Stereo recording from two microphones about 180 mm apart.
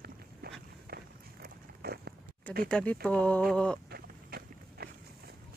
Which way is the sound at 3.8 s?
60° right (ahead or behind).